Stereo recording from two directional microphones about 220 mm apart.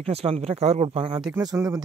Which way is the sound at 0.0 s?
25° right (ahead or behind).